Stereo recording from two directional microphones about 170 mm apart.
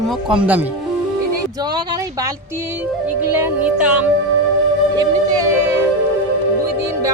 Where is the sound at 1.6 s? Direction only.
25° right (ahead or behind).